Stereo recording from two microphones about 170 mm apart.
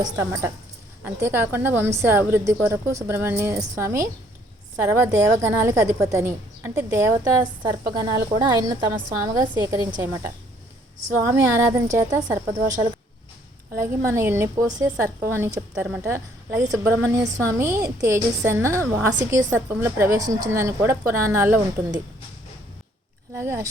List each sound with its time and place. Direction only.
0.0 s a woman's voice: 15° right (ahead or behind)
23.3 s a woman's voice: 15° right (ahead or behind)